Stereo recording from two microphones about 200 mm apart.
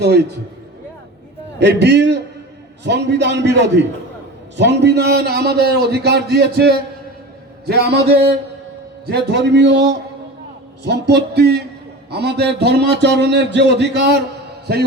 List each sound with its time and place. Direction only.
0.0 s a man's voice: 55° right (ahead or behind)
1.5 s a man's voice: 60° right (ahead or behind)